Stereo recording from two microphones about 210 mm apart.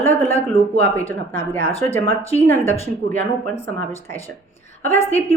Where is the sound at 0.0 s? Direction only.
10° left (ahead or behind).